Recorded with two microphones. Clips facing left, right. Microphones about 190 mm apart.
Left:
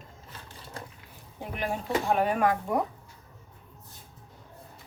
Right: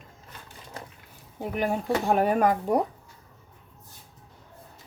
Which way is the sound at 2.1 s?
45° right (ahead or behind).